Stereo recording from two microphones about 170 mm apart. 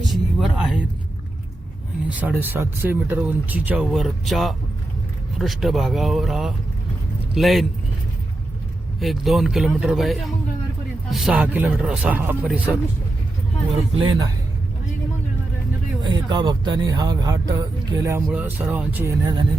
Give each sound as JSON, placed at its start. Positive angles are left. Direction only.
{"t": 0.0, "sound": "a sound", "side_deg": 0}
{"t": 2.0, "sound": "speech", "side_deg": -10}
{"t": 9.0, "sound": "speech", "side_deg": 0}
{"t": 14.0, "sound": "speech", "side_deg": -25}
{"t": 16.0, "sound": "speech", "side_deg": -25}
{"t": 18.3, "sound": "speech", "side_deg": -10}